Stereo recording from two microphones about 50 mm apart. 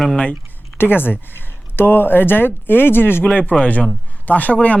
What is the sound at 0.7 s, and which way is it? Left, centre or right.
Speech, left.